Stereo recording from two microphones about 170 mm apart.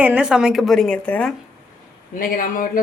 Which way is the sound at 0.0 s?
10° right (ahead or behind).